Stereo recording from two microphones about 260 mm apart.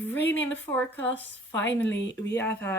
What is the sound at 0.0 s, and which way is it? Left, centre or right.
Speech, centre.